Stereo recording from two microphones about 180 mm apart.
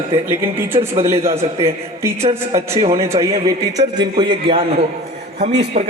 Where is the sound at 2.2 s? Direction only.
35° right (ahead or behind).